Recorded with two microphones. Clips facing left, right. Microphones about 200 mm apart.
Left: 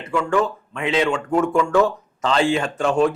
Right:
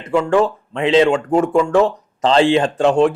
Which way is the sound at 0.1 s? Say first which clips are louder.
Right 5 dB; 30° right (ahead or behind).